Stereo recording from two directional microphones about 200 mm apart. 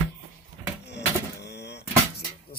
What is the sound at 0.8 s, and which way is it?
Vehicle, 60° left (ahead or behind).